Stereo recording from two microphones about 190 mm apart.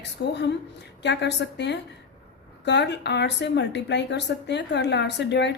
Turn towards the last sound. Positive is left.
turn(degrees=65)  # may be behind; listen again after turning